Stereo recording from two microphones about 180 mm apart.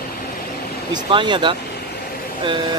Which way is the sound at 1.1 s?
25° right (ahead or behind).